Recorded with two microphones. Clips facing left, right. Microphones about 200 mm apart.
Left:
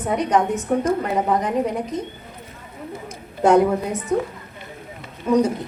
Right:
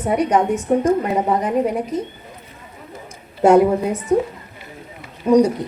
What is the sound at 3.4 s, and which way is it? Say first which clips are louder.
Speech: right 3 dB; 10° right (ahead or behind).